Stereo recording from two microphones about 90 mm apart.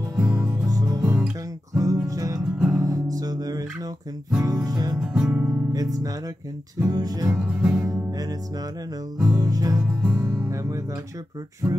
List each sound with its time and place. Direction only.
0.2 s music: 15° right (ahead or behind)
0.7 s music: 45° right (ahead or behind)
1.0 s music: 10° right (ahead or behind)
1.7 s music: 40° right (ahead or behind)
5.0 s music: 10° right (ahead or behind)
5.7 s music: 40° right (ahead or behind)
7.3 s music: 10° right (ahead or behind)
7.8 s music: 40° right (ahead or behind)
9.3 s music: 45° right (ahead or behind)
10.0 s music: 15° right (ahead or behind)
11.6 s music: 15° right (ahead or behind)